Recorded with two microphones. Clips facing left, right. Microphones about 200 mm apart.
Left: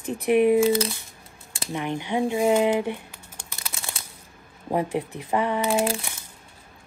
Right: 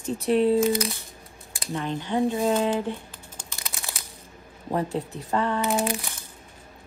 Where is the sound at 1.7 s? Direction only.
15° left (ahead or behind).